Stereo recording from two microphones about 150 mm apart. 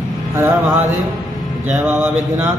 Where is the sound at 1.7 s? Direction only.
5° right (ahead or behind).